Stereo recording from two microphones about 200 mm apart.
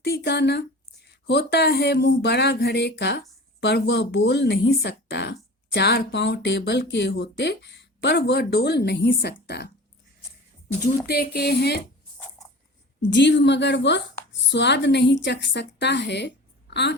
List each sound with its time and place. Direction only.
0.0 s speech: 55° left (ahead or behind)
11.0 s speech: 50° left (ahead or behind)
13.0 s speech: 60° left (ahead or behind)